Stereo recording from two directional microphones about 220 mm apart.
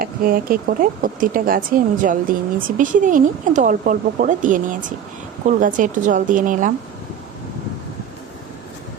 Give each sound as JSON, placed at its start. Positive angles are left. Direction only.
{"t": 0.0, "sound": "speech", "side_deg": -40}